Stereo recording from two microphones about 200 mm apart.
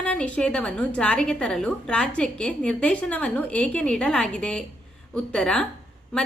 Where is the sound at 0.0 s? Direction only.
5° left (ahead or behind).